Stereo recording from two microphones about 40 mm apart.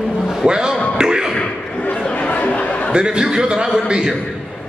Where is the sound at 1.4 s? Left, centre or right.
Left.